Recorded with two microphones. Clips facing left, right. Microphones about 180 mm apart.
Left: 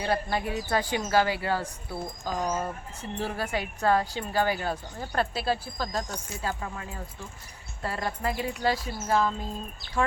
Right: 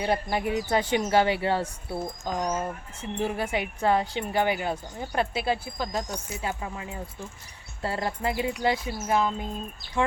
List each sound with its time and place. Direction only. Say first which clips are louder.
0.0 s speech: right 2 dB; 15° right (ahead or behind)